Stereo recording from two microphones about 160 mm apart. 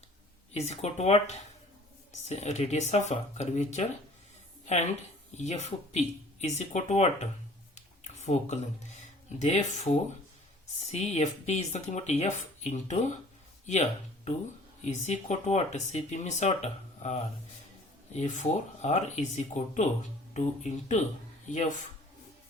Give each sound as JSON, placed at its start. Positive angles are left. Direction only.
{"t": 0.5, "sound": "speech", "side_deg": 45}
{"t": 14.8, "sound": "speech", "side_deg": 45}